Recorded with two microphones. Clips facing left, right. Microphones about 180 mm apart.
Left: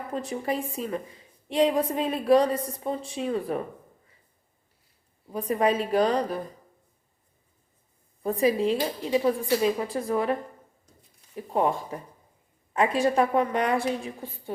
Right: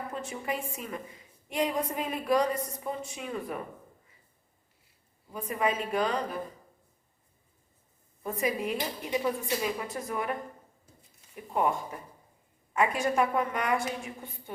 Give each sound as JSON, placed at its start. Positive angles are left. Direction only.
{"t": 0.1, "sound": "a woman's voice", "side_deg": 35}
{"t": 5.3, "sound": "a woman's voice", "side_deg": 35}
{"t": 8.2, "sound": "a woman's voice", "side_deg": 30}
{"t": 11.3, "sound": "a woman's voice", "side_deg": 35}